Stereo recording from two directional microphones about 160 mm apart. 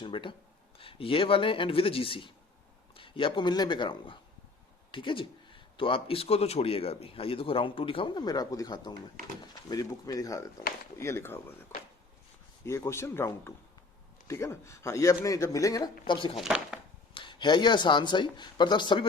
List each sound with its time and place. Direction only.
0.0 s speech: 30° left (ahead or behind); by 11.3 s 15° left (ahead or behind)
12.6 s speech: 15° left (ahead or behind); by 16.4 s 35° left (ahead or behind)
16.4 s speech: 5° right (ahead or behind)
17.2 s speech: 30° left (ahead or behind)